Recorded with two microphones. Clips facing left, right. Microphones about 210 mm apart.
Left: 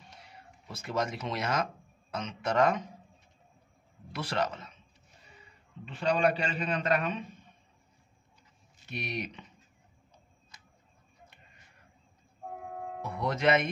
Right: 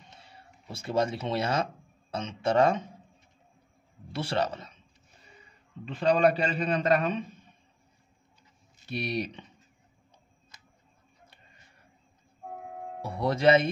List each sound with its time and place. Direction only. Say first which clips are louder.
0.1 s speech: even; 30° right (ahead or behind)
4.1 s a man's voice: right 3 dB; 30° right (ahead or behind)
5.9 s a man's voice: right 4 dB; 35° right (ahead or behind)
8.8 s a man's voice: right 5 dB; 35° right (ahead or behind)
13.0 s speech: right 5 dB; 30° right (ahead or behind)